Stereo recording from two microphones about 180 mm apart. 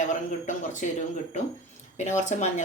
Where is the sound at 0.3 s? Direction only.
45° left (ahead or behind).